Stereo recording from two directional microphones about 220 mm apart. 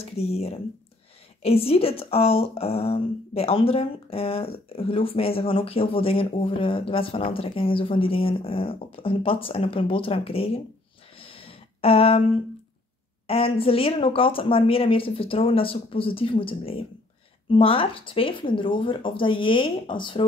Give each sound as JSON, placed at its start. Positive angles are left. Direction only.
{"t": 0.0, "sound": "speech", "side_deg": 30}
{"t": 11.1, "sound": "a sound", "side_deg": 25}
{"t": 13.3, "sound": "speech", "side_deg": 25}